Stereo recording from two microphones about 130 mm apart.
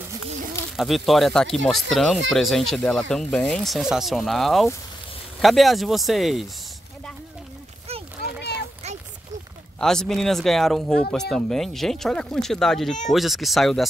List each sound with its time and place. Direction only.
0.7 s speech: centre (ahead or behind)
9.8 s speech: 5° left (ahead or behind)